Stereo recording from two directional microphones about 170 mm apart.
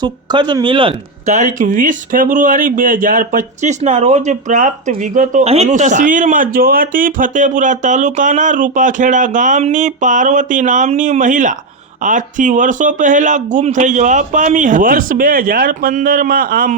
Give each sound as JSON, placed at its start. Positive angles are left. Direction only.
{"t": 0.0, "sound": "speech", "side_deg": -25}